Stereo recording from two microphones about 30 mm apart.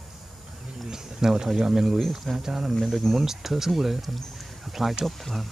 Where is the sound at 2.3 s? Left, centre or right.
Centre.